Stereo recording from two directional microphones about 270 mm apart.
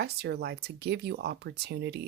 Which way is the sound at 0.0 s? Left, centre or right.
Right.